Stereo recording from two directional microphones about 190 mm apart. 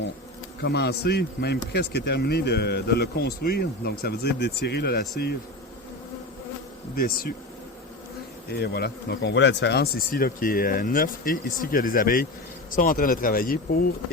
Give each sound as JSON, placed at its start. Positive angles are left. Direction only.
{"t": 0.6, "sound": "speech", "side_deg": 60}
{"t": 6.9, "sound": "speech", "side_deg": 50}
{"t": 8.4, "sound": "speech", "side_deg": 55}